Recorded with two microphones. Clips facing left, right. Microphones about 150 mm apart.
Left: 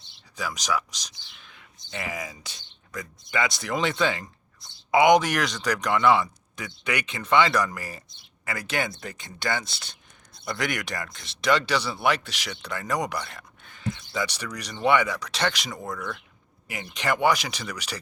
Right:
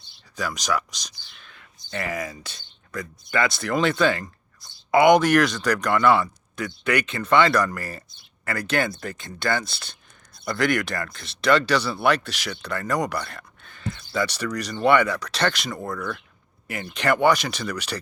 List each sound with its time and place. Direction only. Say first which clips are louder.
0.3 s speech: right 2 dB; 10° left (ahead or behind)
1.5 s a sound: right 5 dB; 15° left (ahead or behind)
2.1 s speech: right 5 dB; 15° left (ahead or behind)